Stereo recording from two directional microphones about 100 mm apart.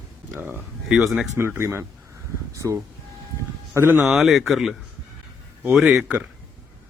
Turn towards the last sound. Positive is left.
turn(degrees=-5)  # may be behind; listen again after turning